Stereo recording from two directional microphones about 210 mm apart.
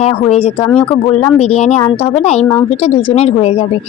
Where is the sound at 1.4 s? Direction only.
30° left (ahead or behind).